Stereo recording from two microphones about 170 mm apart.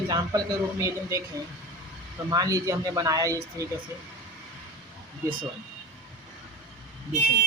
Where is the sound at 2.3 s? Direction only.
20° right (ahead or behind).